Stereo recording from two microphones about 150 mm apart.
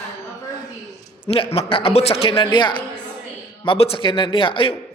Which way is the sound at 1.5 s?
40° left (ahead or behind).